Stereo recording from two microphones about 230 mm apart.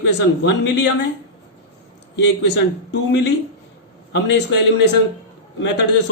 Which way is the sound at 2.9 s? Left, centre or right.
Left.